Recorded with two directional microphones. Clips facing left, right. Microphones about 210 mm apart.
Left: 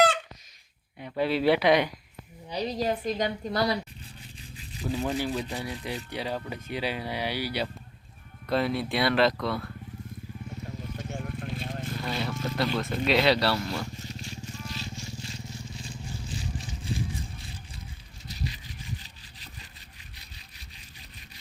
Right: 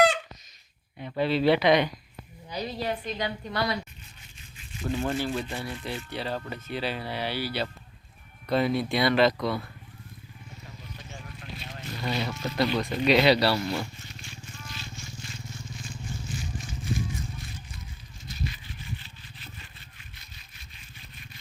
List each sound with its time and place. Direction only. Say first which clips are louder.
0.9 s speech: right 1 dB; 5° left (ahead or behind)
2.5 s a woman's voice: left 3 dB; 35° left (ahead or behind)
4.5 s toothbrush: right 1 dB; 35° left (ahead or behind)
4.9 s speech: right 1 dB; centre (ahead or behind)
5.1 s speech: even; 15° left (ahead or behind)
8.4 s speech: right 2 dB; centre (ahead or behind)
10.9 s vehicle: left 9 dB; 55° left (ahead or behind)
12.0 s speech: right 3 dB; centre (ahead or behind)
12.6 s speech: right 3 dB; 10° right (ahead or behind)
13.9 s vehicle: left 6 dB; 40° left (ahead or behind)
18.3 s a sound: right 1 dB; 40° left (ahead or behind)
20.1 s sawing: left 1 dB; 35° left (ahead or behind)